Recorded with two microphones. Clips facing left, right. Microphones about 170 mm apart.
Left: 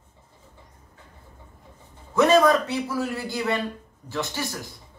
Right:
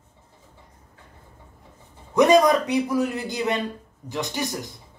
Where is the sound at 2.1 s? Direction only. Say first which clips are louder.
Right 1 dB; 15° right (ahead or behind).